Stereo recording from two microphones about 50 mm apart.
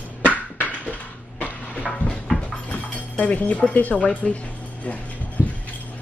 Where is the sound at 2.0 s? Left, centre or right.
Right.